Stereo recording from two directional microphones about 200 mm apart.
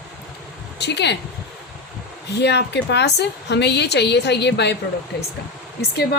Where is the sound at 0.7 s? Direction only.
55° left (ahead or behind).